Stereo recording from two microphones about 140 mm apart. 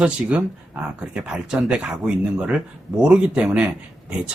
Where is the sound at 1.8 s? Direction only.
10° right (ahead or behind).